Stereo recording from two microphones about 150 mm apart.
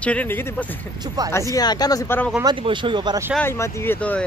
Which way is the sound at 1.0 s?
25° right (ahead or behind).